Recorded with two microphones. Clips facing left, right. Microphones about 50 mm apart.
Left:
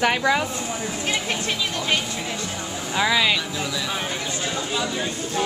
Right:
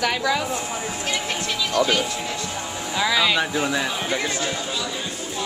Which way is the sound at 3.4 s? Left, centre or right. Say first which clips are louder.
Right 5 dB; right.